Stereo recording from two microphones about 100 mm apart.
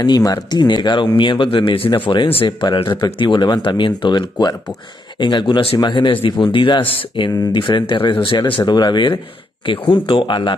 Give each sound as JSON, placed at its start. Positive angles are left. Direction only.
{"t": 0.0, "sound": "speech", "side_deg": 40}
{"t": 2.4, "sound": "speech", "side_deg": 50}
{"t": 8.6, "sound": "speech", "side_deg": 45}